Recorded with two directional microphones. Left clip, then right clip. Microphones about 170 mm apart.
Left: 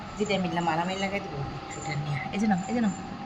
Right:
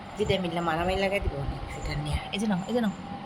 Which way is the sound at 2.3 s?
20° right (ahead or behind).